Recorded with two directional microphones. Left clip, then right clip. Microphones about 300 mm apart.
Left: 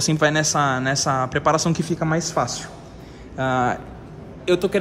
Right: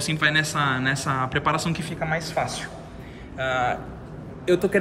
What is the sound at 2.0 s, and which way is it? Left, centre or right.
Speech, left.